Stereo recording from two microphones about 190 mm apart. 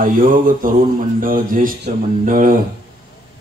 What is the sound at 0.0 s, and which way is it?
Speech, 45° right (ahead or behind).